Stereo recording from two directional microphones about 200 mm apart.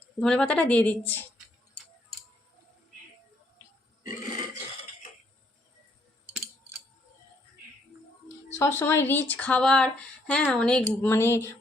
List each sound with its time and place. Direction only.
0.2 s a woman's voice: 5° left (ahead or behind)
8.5 s speech: 10° left (ahead or behind)